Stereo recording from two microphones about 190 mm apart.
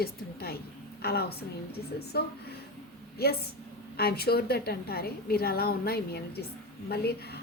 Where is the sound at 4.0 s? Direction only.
55° left (ahead or behind).